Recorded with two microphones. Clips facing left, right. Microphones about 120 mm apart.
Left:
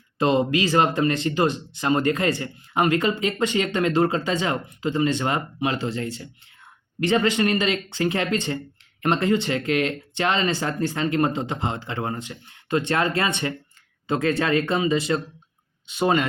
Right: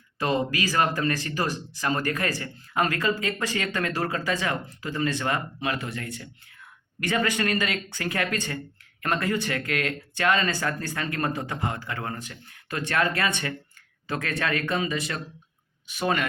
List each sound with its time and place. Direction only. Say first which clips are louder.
0.2 s speech: left 6 dB; 25° left (ahead or behind)